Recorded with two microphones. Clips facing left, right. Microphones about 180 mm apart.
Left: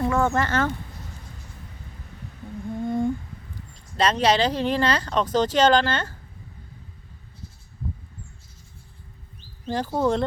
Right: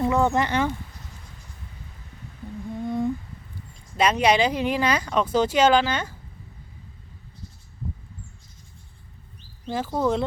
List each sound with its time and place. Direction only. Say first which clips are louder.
0.0 s speech: right 1 dB; 15° right (ahead or behind)
2.8 s humming: left 1 dB; centre (ahead or behind)
3.9 s speech: right 1 dB; 10° right (ahead or behind)
9.6 s speech: left 1 dB; 5° right (ahead or behind)